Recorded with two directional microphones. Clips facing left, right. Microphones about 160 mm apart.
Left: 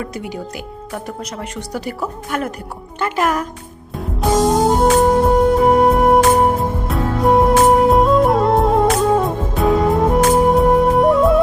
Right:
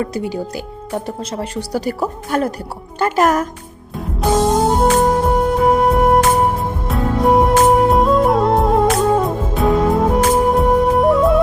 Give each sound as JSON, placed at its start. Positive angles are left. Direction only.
{"t": 0.0, "sound": "speech", "side_deg": -30}
{"t": 4.2, "sound": "music", "side_deg": 0}